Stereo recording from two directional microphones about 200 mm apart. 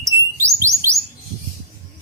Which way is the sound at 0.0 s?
15° right (ahead or behind).